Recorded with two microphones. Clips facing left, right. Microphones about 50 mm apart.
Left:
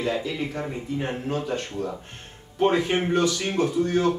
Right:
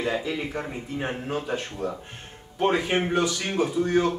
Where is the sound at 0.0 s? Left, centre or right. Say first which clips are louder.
Left 1 dB; centre.